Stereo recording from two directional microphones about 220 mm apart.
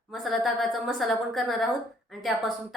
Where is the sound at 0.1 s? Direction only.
Centre (ahead or behind).